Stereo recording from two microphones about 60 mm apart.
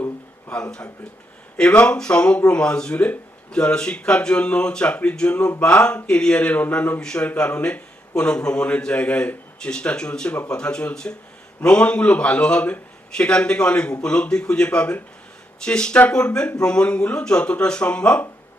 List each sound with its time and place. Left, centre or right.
0.5 s a man's voice: centre